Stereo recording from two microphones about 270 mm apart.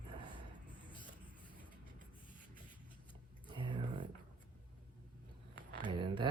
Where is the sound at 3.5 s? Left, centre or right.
Centre.